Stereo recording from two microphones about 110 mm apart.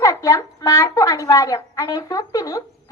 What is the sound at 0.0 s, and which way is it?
A child's voice, 30° left (ahead or behind).